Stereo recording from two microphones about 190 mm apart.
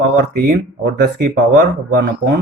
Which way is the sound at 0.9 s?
65° right (ahead or behind).